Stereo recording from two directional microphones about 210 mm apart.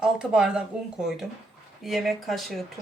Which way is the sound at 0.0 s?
5° right (ahead or behind).